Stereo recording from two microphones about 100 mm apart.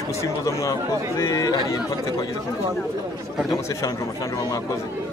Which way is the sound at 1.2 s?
30° left (ahead or behind).